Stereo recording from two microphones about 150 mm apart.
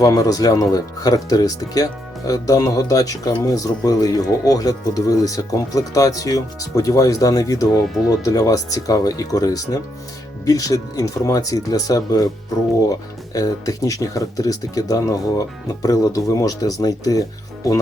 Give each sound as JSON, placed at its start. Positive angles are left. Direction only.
{"t": 0.0, "sound": "speech", "side_deg": 25}